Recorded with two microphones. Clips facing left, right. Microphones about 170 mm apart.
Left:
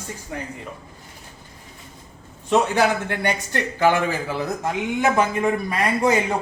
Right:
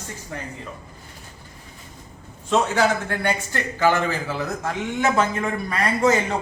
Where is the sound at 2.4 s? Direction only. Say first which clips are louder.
Left 1 dB; 15° left (ahead or behind).